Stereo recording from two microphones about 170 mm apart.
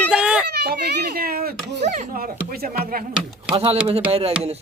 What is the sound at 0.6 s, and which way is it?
Speech, 70° right (ahead or behind).